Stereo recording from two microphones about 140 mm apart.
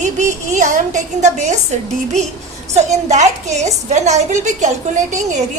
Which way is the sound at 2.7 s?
55° right (ahead or behind).